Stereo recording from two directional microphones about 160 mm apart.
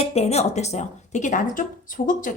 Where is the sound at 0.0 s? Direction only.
40° left (ahead or behind).